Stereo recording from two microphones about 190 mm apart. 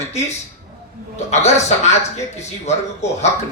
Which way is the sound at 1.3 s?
35° left (ahead or behind).